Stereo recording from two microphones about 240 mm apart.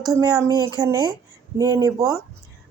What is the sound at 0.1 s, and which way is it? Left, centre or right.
Speech, centre.